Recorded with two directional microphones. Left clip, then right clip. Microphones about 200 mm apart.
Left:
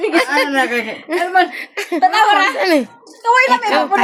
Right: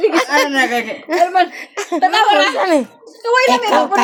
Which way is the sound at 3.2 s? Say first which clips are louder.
Left 1 dB; 20° left (ahead or behind).